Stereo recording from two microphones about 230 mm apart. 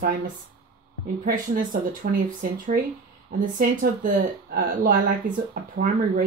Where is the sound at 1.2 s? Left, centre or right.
Right.